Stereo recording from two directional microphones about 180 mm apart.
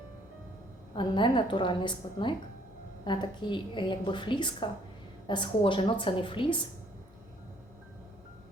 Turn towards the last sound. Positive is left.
turn(degrees=30)  # may be behind; listen again after turning